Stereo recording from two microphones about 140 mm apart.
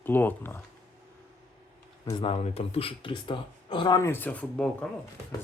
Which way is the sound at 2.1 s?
40° left (ahead or behind).